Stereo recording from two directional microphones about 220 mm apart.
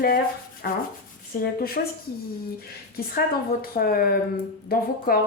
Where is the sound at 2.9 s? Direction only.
45° left (ahead or behind).